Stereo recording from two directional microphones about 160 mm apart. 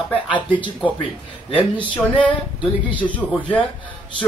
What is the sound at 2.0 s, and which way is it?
Speech, 10° left (ahead or behind).